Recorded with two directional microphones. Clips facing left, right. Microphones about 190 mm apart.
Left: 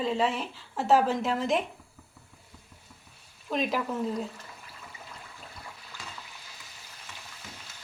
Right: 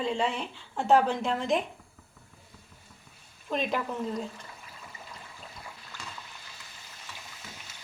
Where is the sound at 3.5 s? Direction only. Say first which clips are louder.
Left 1 dB; centre (ahead or behind).